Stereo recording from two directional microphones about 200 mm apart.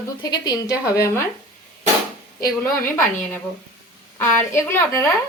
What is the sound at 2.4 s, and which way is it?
A woman's voice, 10° left (ahead or behind).